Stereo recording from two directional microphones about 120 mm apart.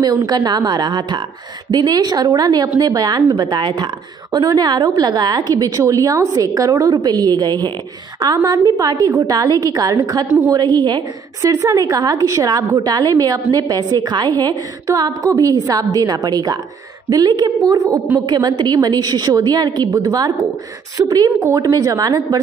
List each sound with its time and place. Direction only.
0.3 s a woman's voice: 35° right (ahead or behind)